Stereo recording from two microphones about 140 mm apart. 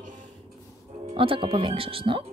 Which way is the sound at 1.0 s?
40° right (ahead or behind).